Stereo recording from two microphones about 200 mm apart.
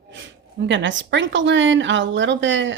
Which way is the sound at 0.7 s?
65° right (ahead or behind).